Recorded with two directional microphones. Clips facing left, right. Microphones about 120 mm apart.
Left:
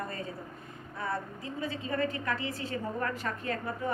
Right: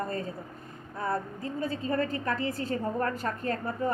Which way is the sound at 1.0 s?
45° right (ahead or behind).